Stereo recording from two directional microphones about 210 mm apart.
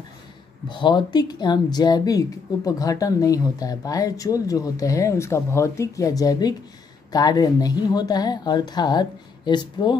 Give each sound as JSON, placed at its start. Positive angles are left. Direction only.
{"t": 0.7, "sound": "a woman's voice", "side_deg": 20}